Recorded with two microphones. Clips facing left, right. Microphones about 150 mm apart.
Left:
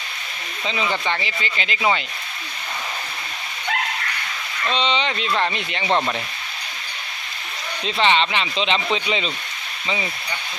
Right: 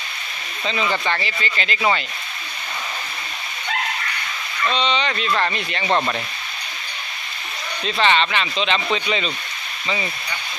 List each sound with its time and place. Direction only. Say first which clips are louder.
0.6 s speech: right 1 dB; 15° left (ahead or behind)
4.7 s speech: left 1 dB; 25° left (ahead or behind)
7.9 s speech: even; 20° left (ahead or behind)